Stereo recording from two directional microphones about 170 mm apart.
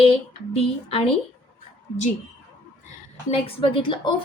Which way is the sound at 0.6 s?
35° left (ahead or behind).